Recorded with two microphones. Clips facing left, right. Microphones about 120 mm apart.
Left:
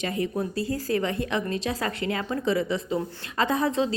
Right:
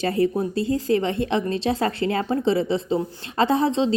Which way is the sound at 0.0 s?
35° right (ahead or behind).